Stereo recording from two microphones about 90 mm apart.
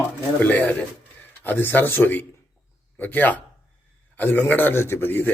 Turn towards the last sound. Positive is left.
turn(degrees=25)  # may be behind; listen again after turning